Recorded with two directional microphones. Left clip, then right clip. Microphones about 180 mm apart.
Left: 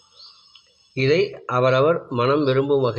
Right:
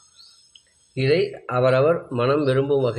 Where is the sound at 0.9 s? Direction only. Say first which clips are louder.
Left 1 dB; 15° left (ahead or behind).